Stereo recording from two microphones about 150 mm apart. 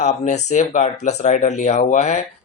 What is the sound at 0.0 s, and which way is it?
Speech, 50° left (ahead or behind).